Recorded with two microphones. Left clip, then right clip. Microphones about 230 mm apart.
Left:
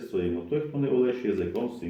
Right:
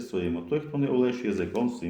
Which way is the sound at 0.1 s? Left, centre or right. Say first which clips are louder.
Left 1 dB; right.